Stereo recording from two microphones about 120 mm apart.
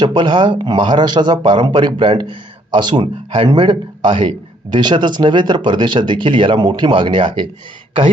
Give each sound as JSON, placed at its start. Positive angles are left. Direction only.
{"t": 0.0, "sound": "speech", "side_deg": -40}